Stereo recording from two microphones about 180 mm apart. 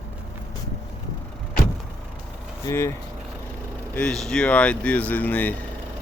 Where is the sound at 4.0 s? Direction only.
5° left (ahead or behind).